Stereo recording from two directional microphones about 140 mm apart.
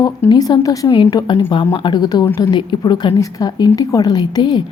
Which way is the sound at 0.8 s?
35° left (ahead or behind).